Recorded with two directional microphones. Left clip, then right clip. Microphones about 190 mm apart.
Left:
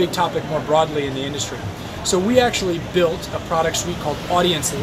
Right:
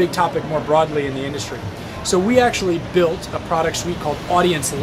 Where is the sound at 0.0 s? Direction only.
15° right (ahead or behind).